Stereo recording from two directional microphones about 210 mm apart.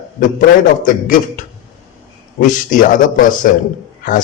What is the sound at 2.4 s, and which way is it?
A man's voice, 40° left (ahead or behind).